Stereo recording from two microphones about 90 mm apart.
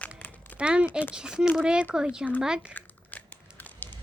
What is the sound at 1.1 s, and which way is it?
Speech, 10° right (ahead or behind).